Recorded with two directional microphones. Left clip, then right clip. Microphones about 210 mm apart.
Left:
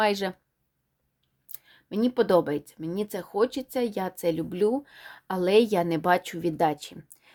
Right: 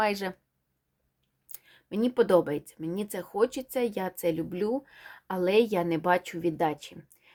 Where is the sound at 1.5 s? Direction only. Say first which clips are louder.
Left 1 dB; 15° left (ahead or behind).